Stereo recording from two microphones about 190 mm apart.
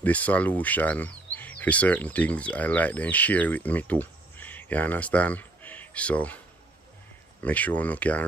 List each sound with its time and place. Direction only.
0.0 s speech: 10° left (ahead or behind)
7.4 s speech: 10° left (ahead or behind)